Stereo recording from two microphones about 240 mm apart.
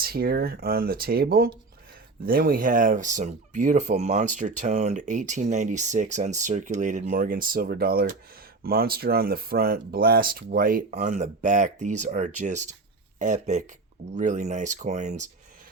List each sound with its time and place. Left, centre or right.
0.0 s speech: right